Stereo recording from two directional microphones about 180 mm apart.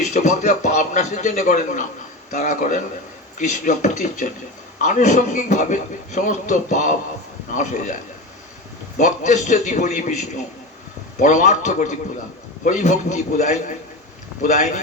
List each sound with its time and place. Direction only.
0.0 s a man's voice: 40° left (ahead or behind)
9.0 s a man's voice: 40° left (ahead or behind)